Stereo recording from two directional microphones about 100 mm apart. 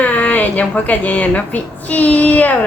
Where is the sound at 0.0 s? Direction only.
15° left (ahead or behind).